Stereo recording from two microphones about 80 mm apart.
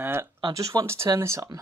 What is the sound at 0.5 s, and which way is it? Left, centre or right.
Speech, right.